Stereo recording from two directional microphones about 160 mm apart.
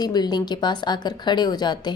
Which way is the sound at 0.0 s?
25° left (ahead or behind).